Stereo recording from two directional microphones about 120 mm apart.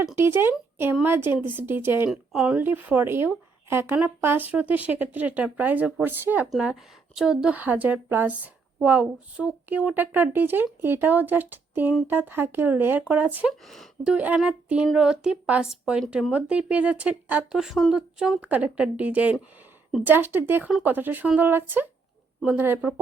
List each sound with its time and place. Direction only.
0.2 s a woman's voice: 20° right (ahead or behind)
2.0 s speech: 5° right (ahead or behind)
2.6 s speech: 15° right (ahead or behind)